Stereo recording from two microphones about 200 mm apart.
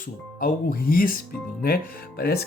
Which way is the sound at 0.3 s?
45° left (ahead or behind).